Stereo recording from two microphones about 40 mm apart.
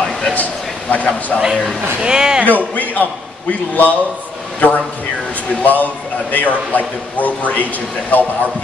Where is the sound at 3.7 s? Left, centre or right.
Left.